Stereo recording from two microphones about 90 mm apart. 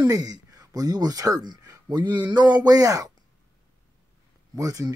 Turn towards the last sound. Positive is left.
turn(degrees=-40)  # may be behind; listen again after turning